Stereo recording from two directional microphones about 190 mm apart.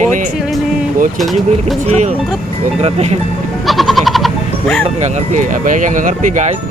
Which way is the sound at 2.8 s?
35° right (ahead or behind).